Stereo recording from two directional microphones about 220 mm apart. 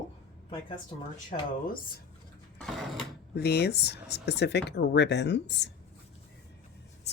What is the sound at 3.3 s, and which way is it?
Speech, 50° left (ahead or behind).